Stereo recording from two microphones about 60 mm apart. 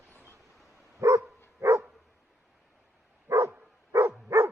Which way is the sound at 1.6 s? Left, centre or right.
Right.